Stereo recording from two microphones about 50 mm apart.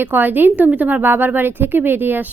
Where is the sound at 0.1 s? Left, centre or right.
Right.